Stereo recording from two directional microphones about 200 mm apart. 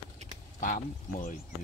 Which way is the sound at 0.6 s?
40° left (ahead or behind).